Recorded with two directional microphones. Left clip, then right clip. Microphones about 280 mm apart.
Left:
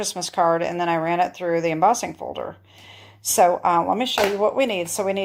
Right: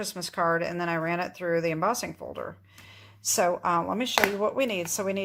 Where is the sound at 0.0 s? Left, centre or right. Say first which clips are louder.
Left 7 dB; centre.